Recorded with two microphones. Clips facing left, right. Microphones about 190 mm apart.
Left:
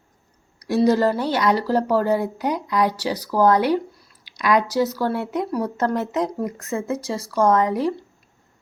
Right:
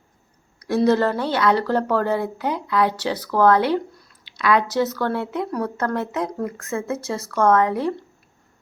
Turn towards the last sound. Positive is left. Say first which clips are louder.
# even
turn(degrees=15)  # may be behind; listen again after turning